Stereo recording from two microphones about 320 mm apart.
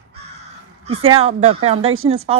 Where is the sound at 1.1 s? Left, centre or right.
Centre.